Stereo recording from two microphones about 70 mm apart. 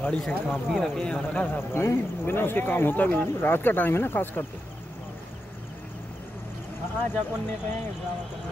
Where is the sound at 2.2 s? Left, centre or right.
Left.